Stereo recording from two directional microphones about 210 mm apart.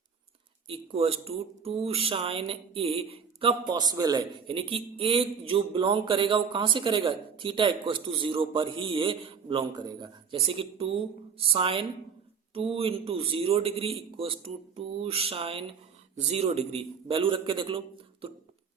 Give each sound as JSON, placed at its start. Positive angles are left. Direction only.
{"t": 0.7, "sound": "speech", "side_deg": -25}